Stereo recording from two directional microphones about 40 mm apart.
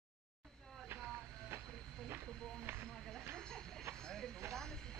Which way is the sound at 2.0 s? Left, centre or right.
Right.